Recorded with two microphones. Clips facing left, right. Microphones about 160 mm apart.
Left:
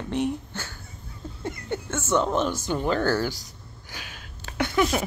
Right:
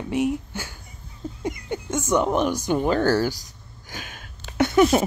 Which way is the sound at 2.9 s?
40° right (ahead or behind).